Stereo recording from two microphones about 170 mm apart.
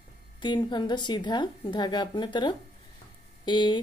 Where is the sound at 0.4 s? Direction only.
25° left (ahead or behind).